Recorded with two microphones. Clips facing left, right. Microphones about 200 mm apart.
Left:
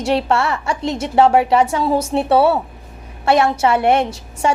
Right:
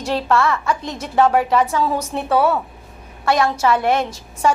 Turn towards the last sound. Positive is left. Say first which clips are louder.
# even
turn(degrees=25)  # may be behind; listen again after turning